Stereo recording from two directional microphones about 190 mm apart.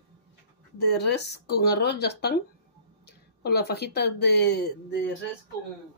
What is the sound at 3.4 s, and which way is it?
Speech, 55° left (ahead or behind).